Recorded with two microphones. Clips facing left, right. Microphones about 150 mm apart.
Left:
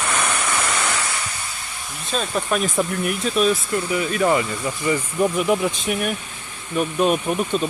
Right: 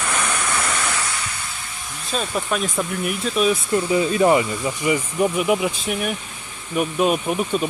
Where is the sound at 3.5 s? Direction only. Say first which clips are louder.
Right 3 dB; 25° right (ahead or behind).